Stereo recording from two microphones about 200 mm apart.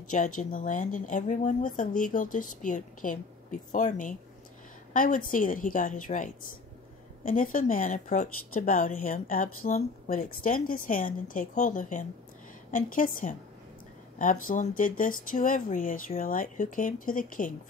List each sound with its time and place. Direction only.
0.1 s a woman's voice: 40° left (ahead or behind)